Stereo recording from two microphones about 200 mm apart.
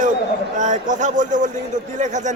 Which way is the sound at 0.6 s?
40° right (ahead or behind).